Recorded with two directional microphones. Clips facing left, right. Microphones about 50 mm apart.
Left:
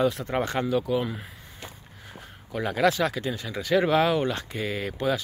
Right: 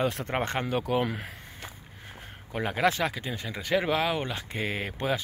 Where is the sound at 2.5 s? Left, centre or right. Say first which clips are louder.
Left 3 dB; right.